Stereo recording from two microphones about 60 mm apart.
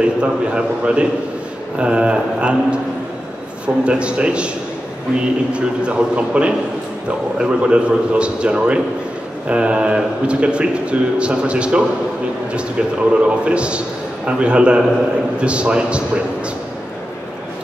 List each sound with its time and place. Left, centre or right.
0.0 s speech: centre
13.2 s speech: centre